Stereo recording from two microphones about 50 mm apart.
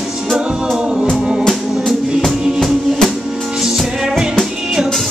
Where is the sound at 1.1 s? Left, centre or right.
Centre.